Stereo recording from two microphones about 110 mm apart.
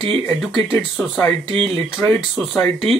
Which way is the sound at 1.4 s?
60° right (ahead or behind).